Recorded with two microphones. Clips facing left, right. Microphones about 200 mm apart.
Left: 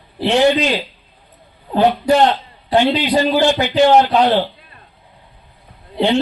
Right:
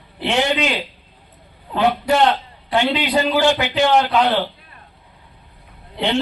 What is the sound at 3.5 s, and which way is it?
Speech, 35° left (ahead or behind).